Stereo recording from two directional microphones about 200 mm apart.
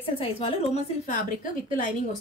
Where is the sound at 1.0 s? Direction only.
40° left (ahead or behind).